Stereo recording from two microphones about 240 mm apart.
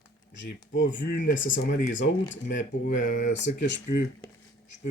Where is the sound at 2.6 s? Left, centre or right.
Left.